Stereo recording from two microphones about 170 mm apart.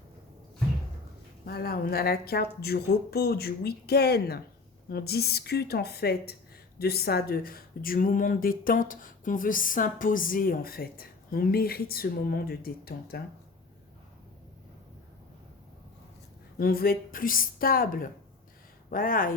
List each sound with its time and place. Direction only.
1.5 s speech: 65° left (ahead or behind)
16.6 s speech: 60° left (ahead or behind)